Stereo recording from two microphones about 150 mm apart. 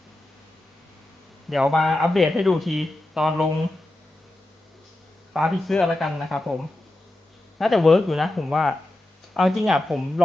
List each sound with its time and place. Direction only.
1.5 s speech: centre (ahead or behind)
5.3 s speech: centre (ahead or behind)
7.6 s speech: centre (ahead or behind)